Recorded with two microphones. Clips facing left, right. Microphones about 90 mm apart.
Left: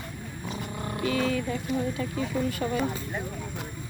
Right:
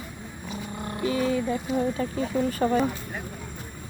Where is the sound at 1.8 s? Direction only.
35° right (ahead or behind).